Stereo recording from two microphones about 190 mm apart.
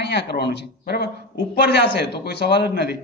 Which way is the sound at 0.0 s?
65° left (ahead or behind).